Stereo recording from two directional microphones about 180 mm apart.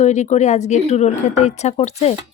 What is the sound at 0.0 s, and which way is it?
Speech, 40° left (ahead or behind).